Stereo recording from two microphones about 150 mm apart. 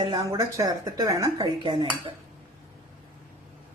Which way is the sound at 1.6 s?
35° right (ahead or behind).